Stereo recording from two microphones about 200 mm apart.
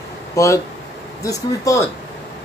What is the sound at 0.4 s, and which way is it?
Speech, 15° left (ahead or behind).